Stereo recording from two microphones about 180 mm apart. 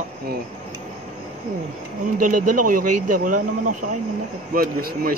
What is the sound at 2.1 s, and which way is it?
Speech, 50° right (ahead or behind).